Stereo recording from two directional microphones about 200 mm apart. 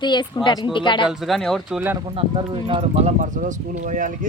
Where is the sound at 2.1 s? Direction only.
25° right (ahead or behind).